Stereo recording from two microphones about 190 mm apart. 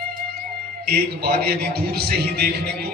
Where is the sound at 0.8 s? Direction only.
55° right (ahead or behind).